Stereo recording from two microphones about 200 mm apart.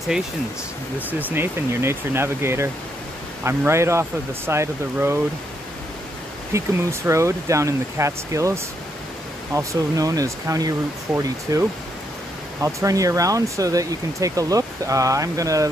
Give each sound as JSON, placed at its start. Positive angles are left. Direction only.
{"t": 0.9, "sound": "speech", "side_deg": -10}
{"t": 6.5, "sound": "speech", "side_deg": -15}